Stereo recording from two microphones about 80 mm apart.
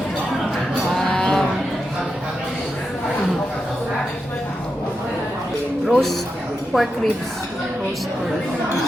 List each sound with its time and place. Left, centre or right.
0.9 s cattle: centre
5.9 s a man's voice: centre